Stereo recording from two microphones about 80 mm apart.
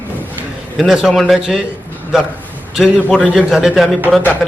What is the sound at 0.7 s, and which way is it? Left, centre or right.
Speech, centre.